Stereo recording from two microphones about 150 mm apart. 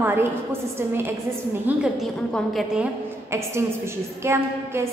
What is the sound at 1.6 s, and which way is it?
A woman's voice, 5° right (ahead or behind).